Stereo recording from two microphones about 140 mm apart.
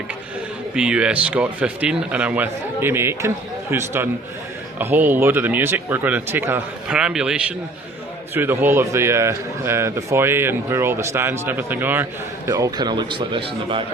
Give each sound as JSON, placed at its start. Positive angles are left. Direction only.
{"t": 0.8, "sound": "a man's voice", "side_deg": -5}